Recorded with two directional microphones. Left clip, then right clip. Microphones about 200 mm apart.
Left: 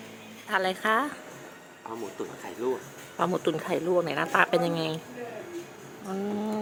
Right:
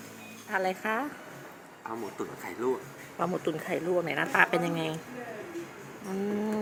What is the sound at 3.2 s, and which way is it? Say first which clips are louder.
Speech: left 4 dB; 15° left (ahead or behind).